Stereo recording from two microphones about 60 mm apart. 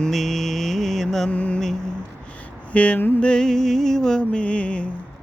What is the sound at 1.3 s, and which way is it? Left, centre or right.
Mantra, left.